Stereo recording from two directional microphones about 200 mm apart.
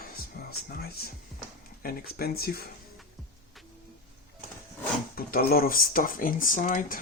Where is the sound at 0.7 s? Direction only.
50° left (ahead or behind).